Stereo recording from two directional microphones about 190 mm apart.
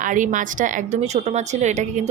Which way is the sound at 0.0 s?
40° right (ahead or behind).